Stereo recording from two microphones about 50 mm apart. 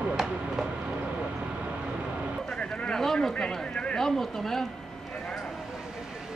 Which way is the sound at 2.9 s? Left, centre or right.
Centre.